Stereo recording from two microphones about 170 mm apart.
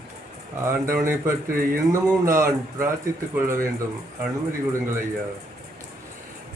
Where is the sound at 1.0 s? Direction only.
15° right (ahead or behind).